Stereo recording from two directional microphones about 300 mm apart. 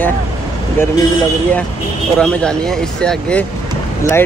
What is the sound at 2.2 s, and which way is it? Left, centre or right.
Speech, centre.